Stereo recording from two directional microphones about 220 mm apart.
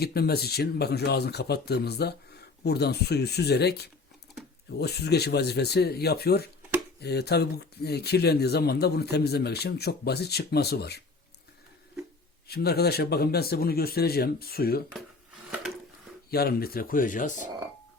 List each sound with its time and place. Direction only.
0.0 s speech: 45° left (ahead or behind)
12.5 s speech: 45° left (ahead or behind)
16.3 s speech: 45° left (ahead or behind)